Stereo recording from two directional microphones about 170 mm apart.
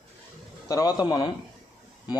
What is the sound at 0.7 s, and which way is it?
Speech, 20° left (ahead or behind).